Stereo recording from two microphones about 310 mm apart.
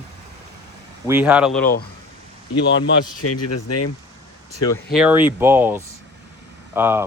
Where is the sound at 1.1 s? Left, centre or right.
Centre.